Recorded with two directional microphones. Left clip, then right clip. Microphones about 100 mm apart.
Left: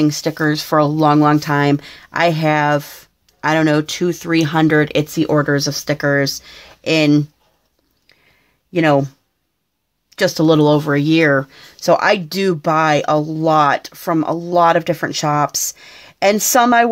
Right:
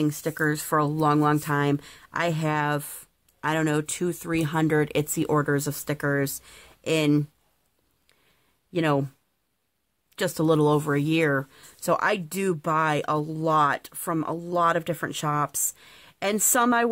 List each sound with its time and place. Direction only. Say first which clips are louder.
0.0 s speech: left 9 dB; 30° right (ahead or behind)
5.1 s speech: left 8 dB; 50° right (ahead or behind)
8.7 s speech: left 11 dB; 40° right (ahead or behind)
10.1 s speech: left 10 dB; 35° right (ahead or behind)